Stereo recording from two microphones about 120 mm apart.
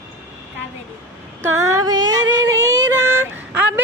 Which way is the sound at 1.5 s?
25° right (ahead or behind).